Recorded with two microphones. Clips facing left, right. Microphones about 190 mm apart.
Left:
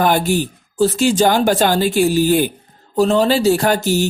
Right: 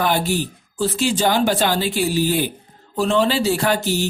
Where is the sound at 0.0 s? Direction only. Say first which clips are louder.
Left 4 dB; 50° left (ahead or behind).